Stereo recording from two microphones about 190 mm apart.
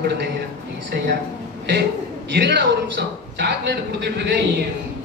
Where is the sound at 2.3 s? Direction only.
65° right (ahead or behind).